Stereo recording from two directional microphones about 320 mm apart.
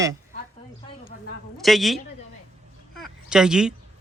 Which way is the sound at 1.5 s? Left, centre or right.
Centre.